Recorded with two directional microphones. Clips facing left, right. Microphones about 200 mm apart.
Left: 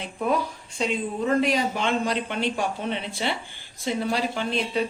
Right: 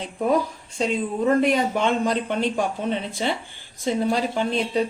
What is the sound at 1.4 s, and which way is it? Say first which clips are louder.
Speech: right 3 dB; 55° right (ahead or behind).